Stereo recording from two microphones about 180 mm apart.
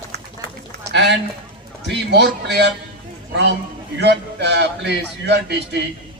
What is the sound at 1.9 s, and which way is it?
Speech, 70° right (ahead or behind).